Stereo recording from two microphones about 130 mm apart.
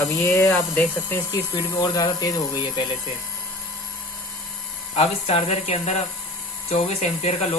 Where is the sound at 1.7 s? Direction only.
30° left (ahead or behind).